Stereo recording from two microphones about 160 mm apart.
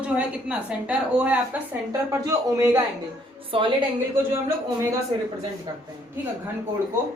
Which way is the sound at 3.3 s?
35° right (ahead or behind).